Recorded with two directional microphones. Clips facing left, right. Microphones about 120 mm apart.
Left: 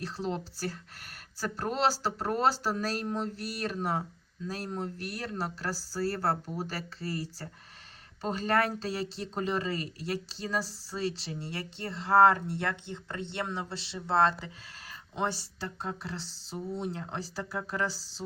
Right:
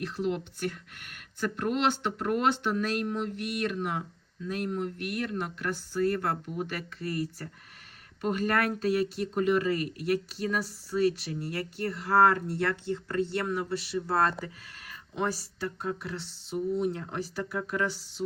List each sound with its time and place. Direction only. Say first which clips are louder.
0.0 s speech: right 3 dB; 30° left (ahead or behind)